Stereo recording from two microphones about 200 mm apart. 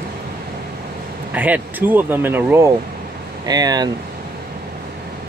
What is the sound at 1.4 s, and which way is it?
Speech, 10° right (ahead or behind).